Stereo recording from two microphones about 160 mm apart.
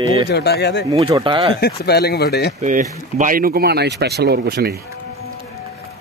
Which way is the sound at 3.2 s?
60° right (ahead or behind).